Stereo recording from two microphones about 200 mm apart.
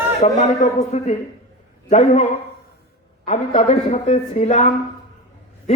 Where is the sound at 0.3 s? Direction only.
35° left (ahead or behind).